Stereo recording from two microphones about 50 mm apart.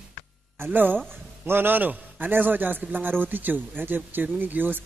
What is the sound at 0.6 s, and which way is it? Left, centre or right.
A man's voice, right.